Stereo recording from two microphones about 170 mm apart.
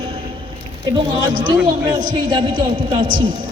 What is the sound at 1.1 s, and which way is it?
A woman's voice, 25° right (ahead or behind).